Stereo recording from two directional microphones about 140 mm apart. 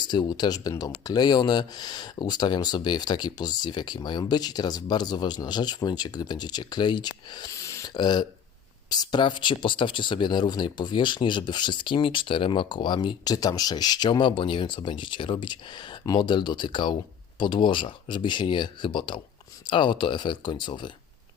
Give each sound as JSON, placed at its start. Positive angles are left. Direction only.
{"t": 0.0, "sound": "speech", "side_deg": 30}